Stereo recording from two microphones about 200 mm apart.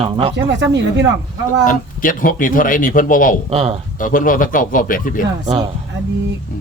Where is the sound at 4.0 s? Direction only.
45° left (ahead or behind).